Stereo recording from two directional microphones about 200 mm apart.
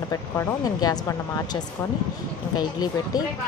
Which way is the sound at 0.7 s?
15° left (ahead or behind).